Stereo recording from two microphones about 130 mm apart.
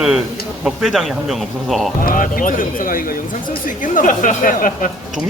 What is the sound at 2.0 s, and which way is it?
Speech, 90° left.